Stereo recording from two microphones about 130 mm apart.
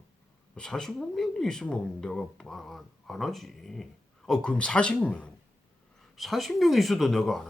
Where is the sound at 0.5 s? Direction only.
5° left (ahead or behind).